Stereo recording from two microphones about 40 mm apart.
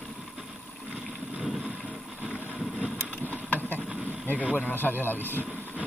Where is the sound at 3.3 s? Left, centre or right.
Left.